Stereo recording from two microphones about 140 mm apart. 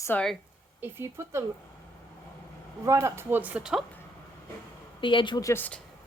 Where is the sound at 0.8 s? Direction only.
15° right (ahead or behind).